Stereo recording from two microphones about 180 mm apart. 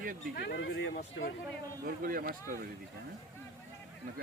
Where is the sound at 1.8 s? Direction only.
55° right (ahead or behind).